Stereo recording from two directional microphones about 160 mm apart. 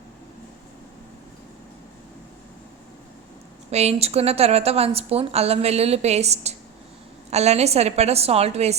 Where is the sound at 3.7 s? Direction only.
40° right (ahead or behind).